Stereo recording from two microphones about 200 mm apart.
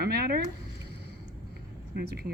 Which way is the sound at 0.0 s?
50° right (ahead or behind).